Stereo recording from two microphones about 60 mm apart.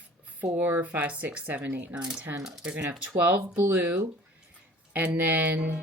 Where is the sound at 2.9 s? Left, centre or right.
Right.